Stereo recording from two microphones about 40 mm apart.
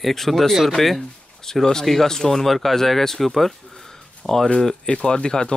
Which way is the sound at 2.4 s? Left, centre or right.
Centre.